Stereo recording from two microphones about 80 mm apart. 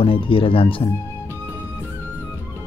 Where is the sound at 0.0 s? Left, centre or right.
Left.